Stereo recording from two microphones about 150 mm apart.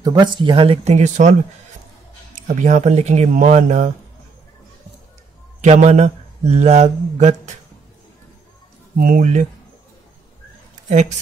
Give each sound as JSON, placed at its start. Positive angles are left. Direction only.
{"t": 0.0, "sound": "speech", "side_deg": -30}
{"t": 2.3, "sound": "speech", "side_deg": -55}
{"t": 5.6, "sound": "speech", "side_deg": -50}
{"t": 9.0, "sound": "speech", "side_deg": -60}
{"t": 10.9, "sound": "speech", "side_deg": -55}